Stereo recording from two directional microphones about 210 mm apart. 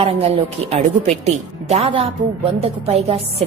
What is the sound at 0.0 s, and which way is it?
A woman's voice, 25° right (ahead or behind).